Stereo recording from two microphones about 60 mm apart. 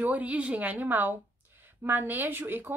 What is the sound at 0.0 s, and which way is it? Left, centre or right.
A woman's voice, right.